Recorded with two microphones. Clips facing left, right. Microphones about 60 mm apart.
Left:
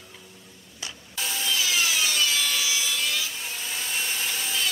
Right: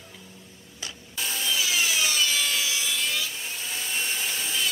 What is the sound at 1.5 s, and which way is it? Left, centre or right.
Wood, centre.